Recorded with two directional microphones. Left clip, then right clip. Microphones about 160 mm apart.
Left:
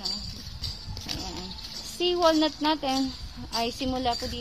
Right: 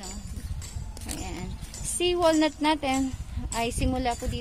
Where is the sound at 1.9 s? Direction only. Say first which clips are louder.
Even; 20° right (ahead or behind).